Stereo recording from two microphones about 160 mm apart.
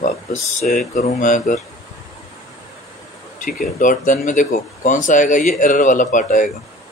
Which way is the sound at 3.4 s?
55° left (ahead or behind).